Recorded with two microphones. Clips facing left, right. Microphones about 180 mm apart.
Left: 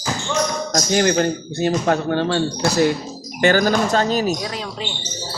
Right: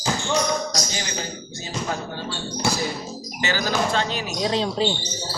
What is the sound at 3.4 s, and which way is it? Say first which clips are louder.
Speech: left 8 dB; 50° left (ahead or behind).